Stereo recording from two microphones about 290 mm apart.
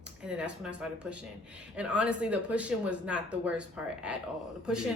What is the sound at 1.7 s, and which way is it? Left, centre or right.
Speech, centre.